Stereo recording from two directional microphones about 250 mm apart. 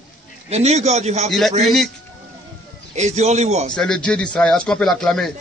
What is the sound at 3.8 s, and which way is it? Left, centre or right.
A man's voice, centre.